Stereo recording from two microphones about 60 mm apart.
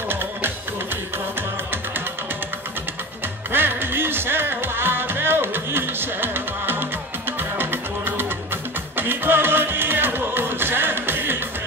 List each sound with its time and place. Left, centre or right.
3.5 s music: right